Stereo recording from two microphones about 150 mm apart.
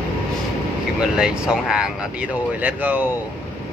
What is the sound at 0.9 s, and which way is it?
Speech, 5° right (ahead or behind).